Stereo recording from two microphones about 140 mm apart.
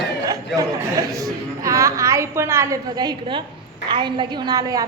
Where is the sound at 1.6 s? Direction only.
20° right (ahead or behind).